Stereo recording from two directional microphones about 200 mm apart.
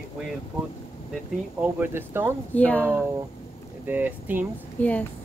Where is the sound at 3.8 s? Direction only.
10° right (ahead or behind).